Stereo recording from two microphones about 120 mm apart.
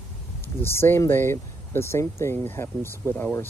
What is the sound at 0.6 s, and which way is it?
Speech, 20° left (ahead or behind).